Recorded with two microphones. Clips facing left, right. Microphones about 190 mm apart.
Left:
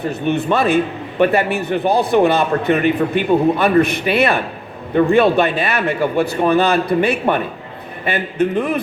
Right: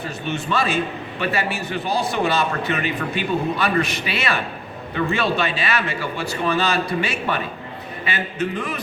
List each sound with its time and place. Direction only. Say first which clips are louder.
0.1 s a man's voice: left 7 dB; 60° left (ahead or behind)